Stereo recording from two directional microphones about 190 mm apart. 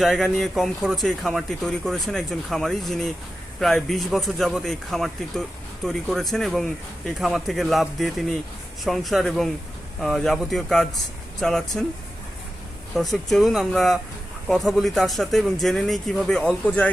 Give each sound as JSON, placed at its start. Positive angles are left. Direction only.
{"t": 0.0, "sound": "speech", "side_deg": 0}
{"t": 12.9, "sound": "speech", "side_deg": 0}